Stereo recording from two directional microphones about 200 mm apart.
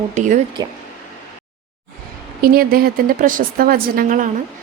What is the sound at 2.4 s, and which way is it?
A woman's voice, 50° right (ahead or behind).